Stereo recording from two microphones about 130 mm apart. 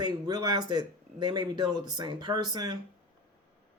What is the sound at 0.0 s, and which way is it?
Speech, 30° right (ahead or behind).